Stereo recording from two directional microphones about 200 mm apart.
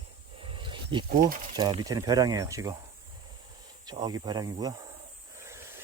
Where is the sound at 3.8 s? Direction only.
20° right (ahead or behind).